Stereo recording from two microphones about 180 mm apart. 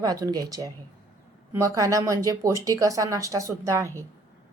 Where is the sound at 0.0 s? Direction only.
20° right (ahead or behind).